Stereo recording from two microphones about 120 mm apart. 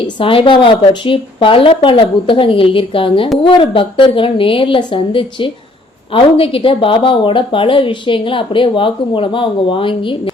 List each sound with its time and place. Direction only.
0.2 s a woman's voice: 45° left (ahead or behind)